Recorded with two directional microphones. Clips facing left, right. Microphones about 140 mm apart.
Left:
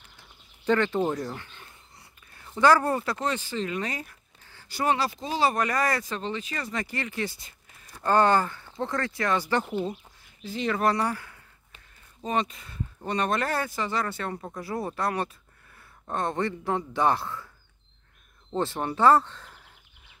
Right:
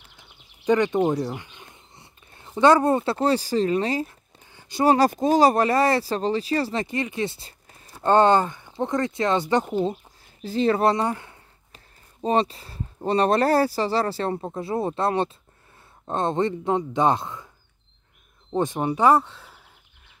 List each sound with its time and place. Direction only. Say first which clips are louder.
0.7 s speech: right 4 dB; 15° right (ahead or behind)
4.5 s a sound: right 6 dB; 20° right (ahead or behind)
4.8 s speech: right 9 dB; 45° right (ahead or behind); by 9.7 s 20° right (ahead or behind)
10.4 s speech: right 6 dB; 35° right (ahead or behind); by 17.5 s 20° right (ahead or behind)
18.5 s speech: right 5 dB; 15° right (ahead or behind)